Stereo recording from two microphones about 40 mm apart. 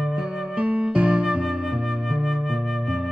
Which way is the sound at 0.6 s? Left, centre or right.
Right.